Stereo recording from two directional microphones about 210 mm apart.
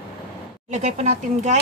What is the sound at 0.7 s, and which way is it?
Speech, 35° right (ahead or behind).